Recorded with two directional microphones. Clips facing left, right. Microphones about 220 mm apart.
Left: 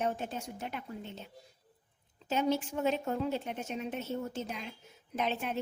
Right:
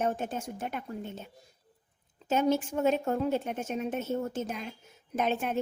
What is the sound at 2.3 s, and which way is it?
A woman's voice, 50° right (ahead or behind).